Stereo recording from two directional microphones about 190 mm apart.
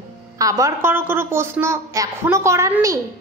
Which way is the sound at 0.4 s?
15° right (ahead or behind).